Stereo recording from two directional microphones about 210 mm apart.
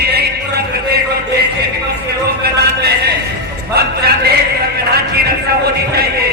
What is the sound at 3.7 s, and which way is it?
Speech, 50° right (ahead or behind).